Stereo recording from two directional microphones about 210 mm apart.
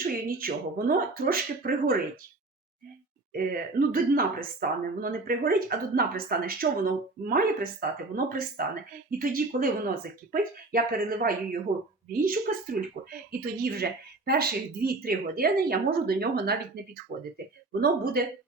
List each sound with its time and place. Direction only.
0.0 s speech: 45° right (ahead or behind)
3.3 s speech: 40° right (ahead or behind)